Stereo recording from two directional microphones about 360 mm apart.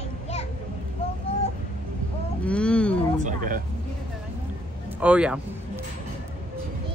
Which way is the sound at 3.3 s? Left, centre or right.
Right.